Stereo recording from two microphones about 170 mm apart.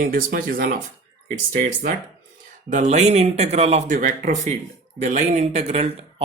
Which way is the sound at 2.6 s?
45° right (ahead or behind).